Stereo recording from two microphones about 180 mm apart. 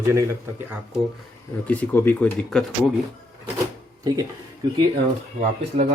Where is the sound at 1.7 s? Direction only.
10° left (ahead or behind).